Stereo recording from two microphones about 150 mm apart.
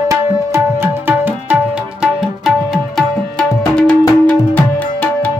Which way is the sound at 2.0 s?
Centre (ahead or behind).